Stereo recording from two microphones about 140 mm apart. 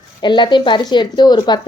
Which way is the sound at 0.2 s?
35° left (ahead or behind).